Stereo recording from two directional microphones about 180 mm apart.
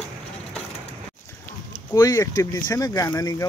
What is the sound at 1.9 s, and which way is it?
Speech, 20° left (ahead or behind).